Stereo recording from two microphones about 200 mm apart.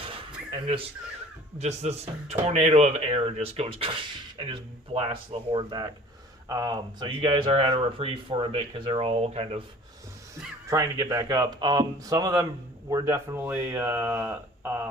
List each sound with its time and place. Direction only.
1.5 s speech: 35° right (ahead or behind)
10.7 s speech: 15° right (ahead or behind)